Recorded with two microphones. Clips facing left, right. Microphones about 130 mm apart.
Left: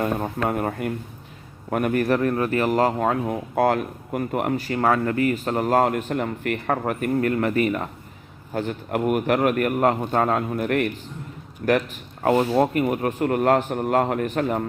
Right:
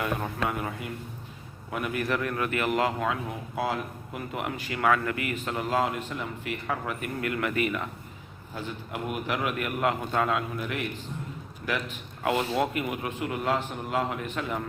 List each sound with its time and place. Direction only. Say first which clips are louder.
0.0 s speech: left 5 dB; 40° left (ahead or behind)
8.5 s speech: left 10 dB; 55° left (ahead or behind)
12.2 s speech: left 7 dB; 40° left (ahead or behind)